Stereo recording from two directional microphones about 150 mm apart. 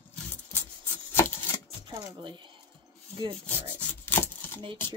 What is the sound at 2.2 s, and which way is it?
Speech, 30° right (ahead or behind).